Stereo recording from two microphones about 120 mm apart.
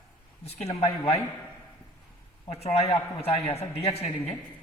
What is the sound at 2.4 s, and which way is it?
A woman's voice, 60° left (ahead or behind).